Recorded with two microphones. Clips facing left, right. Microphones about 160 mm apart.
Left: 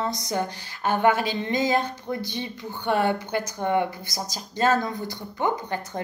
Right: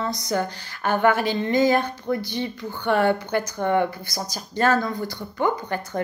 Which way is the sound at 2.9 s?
55° right (ahead or behind).